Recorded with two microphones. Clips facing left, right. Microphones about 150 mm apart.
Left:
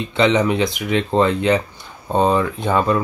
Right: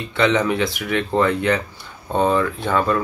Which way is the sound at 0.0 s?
20° left (ahead or behind).